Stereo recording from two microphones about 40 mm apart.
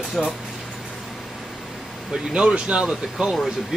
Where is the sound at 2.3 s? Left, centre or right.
Right.